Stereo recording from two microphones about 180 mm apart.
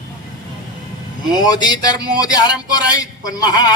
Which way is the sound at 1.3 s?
20° left (ahead or behind).